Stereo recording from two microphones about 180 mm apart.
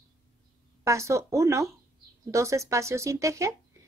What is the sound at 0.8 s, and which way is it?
A woman's voice, 15° right (ahead or behind).